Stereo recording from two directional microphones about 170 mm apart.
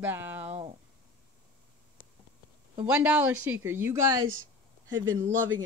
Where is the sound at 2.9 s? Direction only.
10° right (ahead or behind).